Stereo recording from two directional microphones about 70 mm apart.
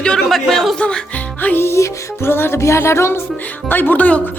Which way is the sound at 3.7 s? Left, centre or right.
Left.